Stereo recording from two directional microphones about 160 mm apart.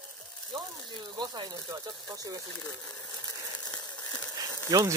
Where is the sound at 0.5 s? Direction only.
30° right (ahead or behind).